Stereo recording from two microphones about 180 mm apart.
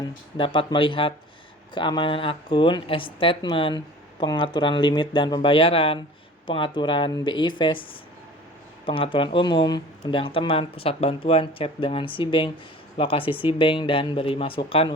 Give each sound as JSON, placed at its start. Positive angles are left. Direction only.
{"t": 0.0, "sound": "speech", "side_deg": 25}
{"t": 8.9, "sound": "speech", "side_deg": 30}